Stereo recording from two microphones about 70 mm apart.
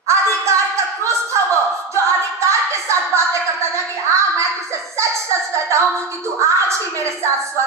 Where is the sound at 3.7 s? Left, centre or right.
Right.